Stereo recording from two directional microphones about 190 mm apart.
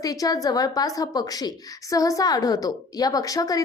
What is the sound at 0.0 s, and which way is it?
A woman's voice, 20° left (ahead or behind).